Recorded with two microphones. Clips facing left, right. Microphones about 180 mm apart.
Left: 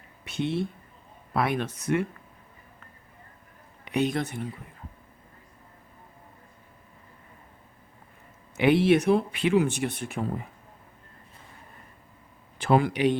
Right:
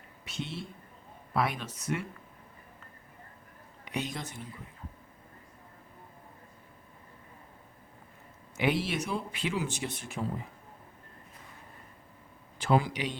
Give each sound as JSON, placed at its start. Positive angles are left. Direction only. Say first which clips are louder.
{"t": 0.3, "sound": "speech", "louder": "left 11 dB", "side_deg": 60}
{"t": 3.8, "sound": "speech", "louder": "left 10 dB", "side_deg": 60}
{"t": 8.5, "sound": "speech", "louder": "left 10 dB", "side_deg": 60}
{"t": 12.5, "sound": "a man's voice", "louder": "left 5 dB", "side_deg": 60}